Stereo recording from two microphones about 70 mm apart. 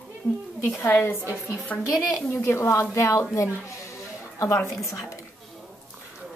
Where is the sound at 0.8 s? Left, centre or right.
Left.